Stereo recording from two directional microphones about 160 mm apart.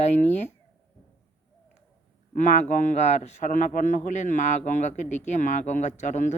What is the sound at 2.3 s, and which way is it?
Speech, 50° left (ahead or behind).